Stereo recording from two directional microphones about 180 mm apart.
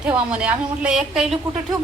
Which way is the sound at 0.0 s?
5° right (ahead or behind).